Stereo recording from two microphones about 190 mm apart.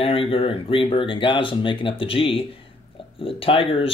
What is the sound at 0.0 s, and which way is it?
Speech, 30° left (ahead or behind).